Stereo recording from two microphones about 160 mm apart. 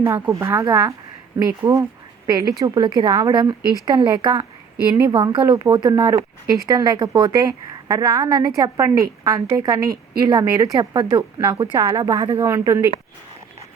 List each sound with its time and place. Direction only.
0.0 s a woman's voice: 20° right (ahead or behind)
5.4 s speech: 15° right (ahead or behind)
11.2 s a woman's voice: 20° right (ahead or behind)